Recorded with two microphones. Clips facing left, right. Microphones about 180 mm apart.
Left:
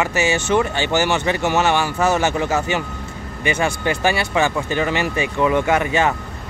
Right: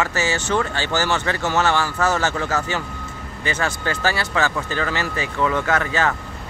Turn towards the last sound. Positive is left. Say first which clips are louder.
# left 3 dB
turn(degrees=15)  # may be behind; listen again after turning